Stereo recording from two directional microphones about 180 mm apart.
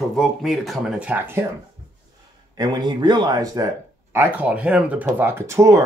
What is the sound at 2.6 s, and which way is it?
Speech, 25° right (ahead or behind).